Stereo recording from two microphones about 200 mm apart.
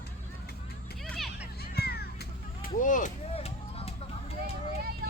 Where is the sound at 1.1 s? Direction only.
Centre (ahead or behind).